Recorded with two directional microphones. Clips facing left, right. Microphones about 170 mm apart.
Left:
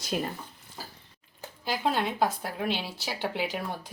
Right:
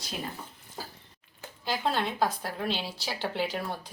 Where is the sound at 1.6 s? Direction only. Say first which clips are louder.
Left 1 dB; 10° left (ahead or behind).